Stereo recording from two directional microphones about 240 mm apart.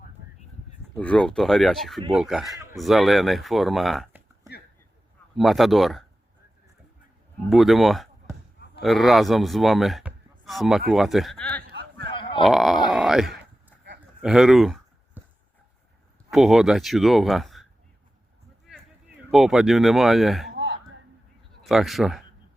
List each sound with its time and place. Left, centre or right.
0.9 s speech: centre
5.4 s speech: centre
7.5 s a man's voice: centre
12.0 s a sound: left
12.4 s speech: centre
12.9 s a sound: centre
16.3 s speech: centre
19.3 s speech: centre
21.6 s speech: centre